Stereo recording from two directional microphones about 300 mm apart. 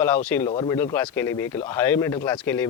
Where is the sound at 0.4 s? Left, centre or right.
Centre.